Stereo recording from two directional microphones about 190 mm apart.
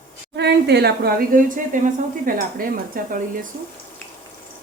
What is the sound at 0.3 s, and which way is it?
A woman's voice, 60° right (ahead or behind).